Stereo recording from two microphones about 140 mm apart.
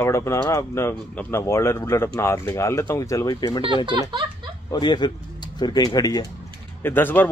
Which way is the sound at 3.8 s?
35° right (ahead or behind).